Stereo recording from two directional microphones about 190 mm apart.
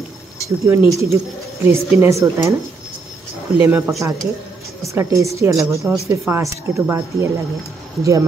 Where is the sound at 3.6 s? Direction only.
15° right (ahead or behind).